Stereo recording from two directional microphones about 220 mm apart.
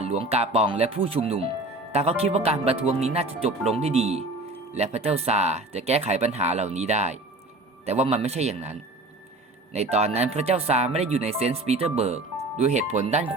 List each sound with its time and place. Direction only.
0.0 s speech: 25° right (ahead or behind)
9.7 s speech: 30° right (ahead or behind)